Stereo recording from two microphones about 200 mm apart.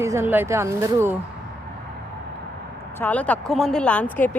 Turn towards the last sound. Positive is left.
turn(degrees=10)  # may be behind; listen again after turning